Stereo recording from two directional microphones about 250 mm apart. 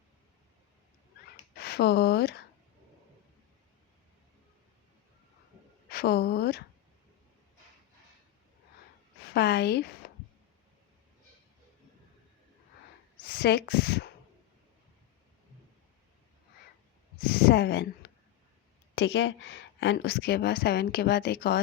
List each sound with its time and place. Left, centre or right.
1.5 s speech: left
5.9 s speech: left
9.3 s a woman's voice: left
13.2 s speech: left
17.2 s a sound: left
18.9 s a woman's voice: left